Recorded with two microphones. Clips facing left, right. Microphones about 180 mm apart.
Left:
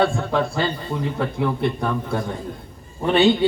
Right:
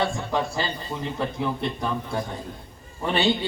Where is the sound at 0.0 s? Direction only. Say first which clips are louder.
Left 5 dB; 60° left (ahead or behind).